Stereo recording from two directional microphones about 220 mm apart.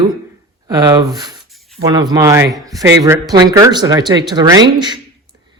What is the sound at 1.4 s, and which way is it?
Rub, centre (ahead or behind).